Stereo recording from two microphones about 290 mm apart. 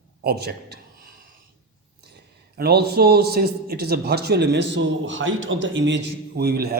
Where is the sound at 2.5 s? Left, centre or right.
Right.